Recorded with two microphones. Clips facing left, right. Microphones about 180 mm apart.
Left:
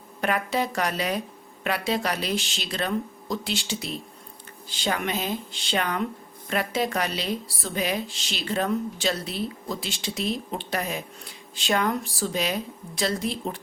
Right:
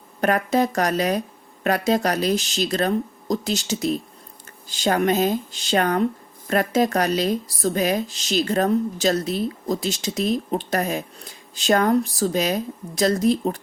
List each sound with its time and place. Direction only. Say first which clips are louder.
0.2 s speech: right 6 dB; 45° right (ahead or behind)